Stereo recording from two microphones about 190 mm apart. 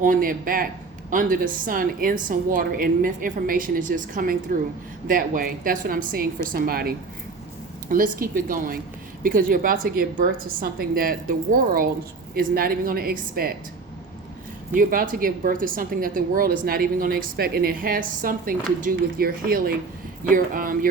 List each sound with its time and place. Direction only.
0.0 s a woman's voice: 45° right (ahead or behind)
14.7 s a woman's voice: 45° right (ahead or behind)